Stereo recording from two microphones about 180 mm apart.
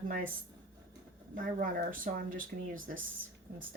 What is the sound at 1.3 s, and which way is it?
Speech, 50° right (ahead or behind).